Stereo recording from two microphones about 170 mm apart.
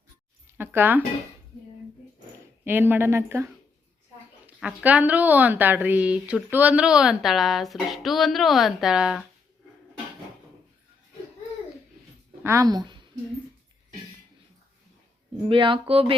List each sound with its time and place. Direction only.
0.5 s speech: 10° right (ahead or behind)
2.6 s a woman's voice: 10° right (ahead or behind)
12.4 s a woman's voice: 15° right (ahead or behind)
15.4 s speech: 30° right (ahead or behind)